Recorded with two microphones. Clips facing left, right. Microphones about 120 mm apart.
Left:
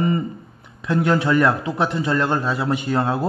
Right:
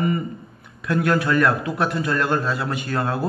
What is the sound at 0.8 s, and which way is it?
A man's voice, 25° left (ahead or behind).